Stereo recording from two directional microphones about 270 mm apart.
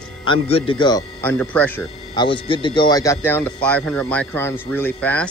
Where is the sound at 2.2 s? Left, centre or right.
Centre.